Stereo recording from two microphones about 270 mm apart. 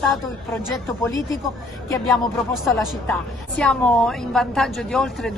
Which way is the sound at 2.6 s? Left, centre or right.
Centre.